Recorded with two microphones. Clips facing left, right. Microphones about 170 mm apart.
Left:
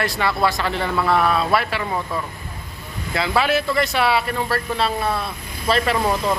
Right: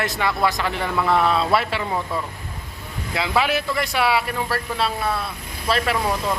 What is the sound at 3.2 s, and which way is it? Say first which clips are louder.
A man's voice: left 2 dB; 15° right (ahead or behind).